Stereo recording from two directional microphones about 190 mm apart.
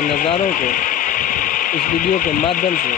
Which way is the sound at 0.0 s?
45° left (ahead or behind).